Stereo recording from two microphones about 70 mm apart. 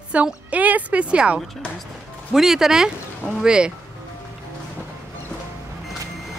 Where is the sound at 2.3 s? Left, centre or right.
Centre.